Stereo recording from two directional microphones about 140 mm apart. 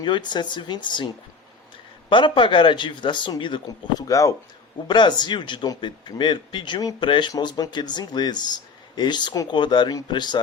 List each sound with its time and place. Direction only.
0.0 s speech: 30° left (ahead or behind)
4.9 s speech: 35° left (ahead or behind)